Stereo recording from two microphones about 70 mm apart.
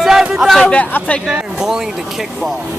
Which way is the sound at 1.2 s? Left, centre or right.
Centre.